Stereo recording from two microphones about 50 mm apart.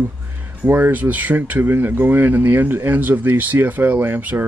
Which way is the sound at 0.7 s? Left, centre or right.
Right.